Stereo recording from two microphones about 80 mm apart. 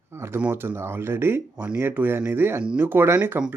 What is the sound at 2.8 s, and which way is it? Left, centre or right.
Speech, right.